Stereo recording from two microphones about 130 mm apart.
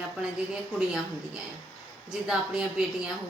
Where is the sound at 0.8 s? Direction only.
5° right (ahead or behind).